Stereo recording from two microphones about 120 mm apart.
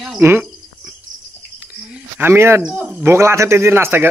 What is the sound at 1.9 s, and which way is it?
Speech, 20° right (ahead or behind).